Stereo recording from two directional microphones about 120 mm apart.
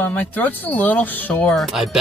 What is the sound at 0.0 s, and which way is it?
Speech, 15° left (ahead or behind).